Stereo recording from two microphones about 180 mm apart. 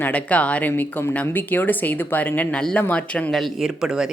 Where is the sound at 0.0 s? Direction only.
10° left (ahead or behind).